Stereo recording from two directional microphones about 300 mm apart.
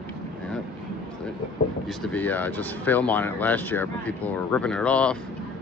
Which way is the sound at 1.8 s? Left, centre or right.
Centre.